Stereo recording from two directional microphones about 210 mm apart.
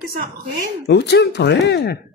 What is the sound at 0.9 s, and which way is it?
Speech, 55° left (ahead or behind).